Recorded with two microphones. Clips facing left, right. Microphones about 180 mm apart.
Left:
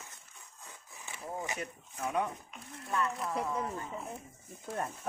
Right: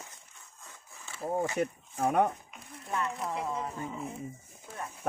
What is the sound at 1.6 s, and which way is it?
Speech, 60° right (ahead or behind).